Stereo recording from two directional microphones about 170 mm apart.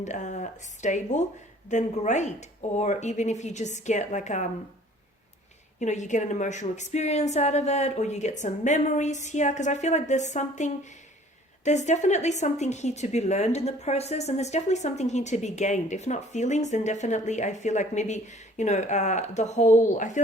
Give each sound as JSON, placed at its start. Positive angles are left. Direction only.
{"t": 0.0, "sound": "a woman's voice", "side_deg": 45}
{"t": 5.8, "sound": "a woman's voice", "side_deg": 45}